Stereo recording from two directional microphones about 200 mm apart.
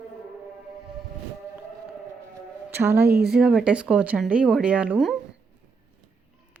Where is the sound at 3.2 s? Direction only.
5° right (ahead or behind).